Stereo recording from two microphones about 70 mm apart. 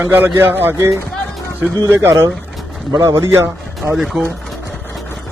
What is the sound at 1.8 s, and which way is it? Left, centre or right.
A man's voice, right.